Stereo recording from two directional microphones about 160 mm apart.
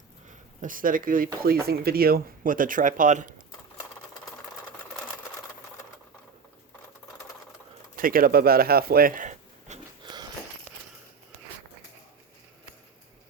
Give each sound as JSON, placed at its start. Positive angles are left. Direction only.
{"t": 0.3, "sound": "speech", "side_deg": -55}
{"t": 1.6, "sound": "speech", "side_deg": -75}
{"t": 7.9, "sound": "speech", "side_deg": -65}